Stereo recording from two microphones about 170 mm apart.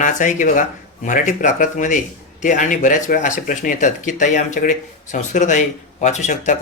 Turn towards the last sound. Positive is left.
turn(degrees=45)  # may be behind; listen again after turning